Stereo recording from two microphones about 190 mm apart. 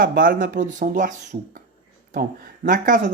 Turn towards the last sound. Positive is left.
turn(degrees=-45)  # may be behind; listen again after turning